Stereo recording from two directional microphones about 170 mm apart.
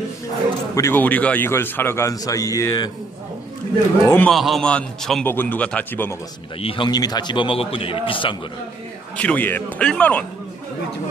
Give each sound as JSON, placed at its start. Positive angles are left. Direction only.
{"t": 0.7, "sound": "a man's voice", "side_deg": 15}
{"t": 4.0, "sound": "a man's voice", "side_deg": 10}
{"t": 6.6, "sound": "a man's voice", "side_deg": 30}
{"t": 9.1, "sound": "a man's voice", "side_deg": 10}